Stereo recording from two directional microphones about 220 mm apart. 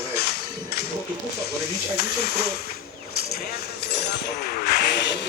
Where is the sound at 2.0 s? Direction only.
45° left (ahead or behind).